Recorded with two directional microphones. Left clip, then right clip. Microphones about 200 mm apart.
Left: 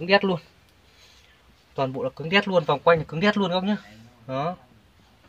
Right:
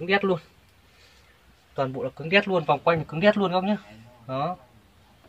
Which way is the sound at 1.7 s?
15° left (ahead or behind).